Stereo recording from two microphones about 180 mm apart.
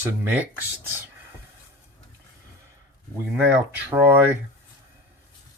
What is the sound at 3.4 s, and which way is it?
Speech, 10° right (ahead or behind).